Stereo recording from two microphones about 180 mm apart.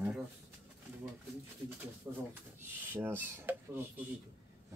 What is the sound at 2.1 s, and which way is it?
Speech, 10° right (ahead or behind).